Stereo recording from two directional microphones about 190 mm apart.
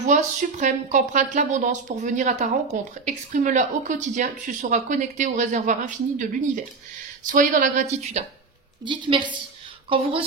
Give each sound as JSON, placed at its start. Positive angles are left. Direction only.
{"t": 0.0, "sound": "a woman's voice", "side_deg": -40}
{"t": 8.8, "sound": "a woman's voice", "side_deg": -25}